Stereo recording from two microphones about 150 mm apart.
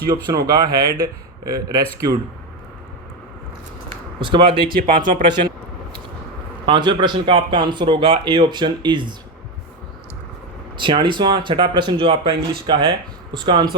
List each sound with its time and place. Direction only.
0.1 s a man's voice: 25° right (ahead or behind)
4.2 s speech: 35° right (ahead or behind)
4.7 s speech: 70° right (ahead or behind)
6.7 s speech: 30° right (ahead or behind)
10.8 s speech: 35° right (ahead or behind)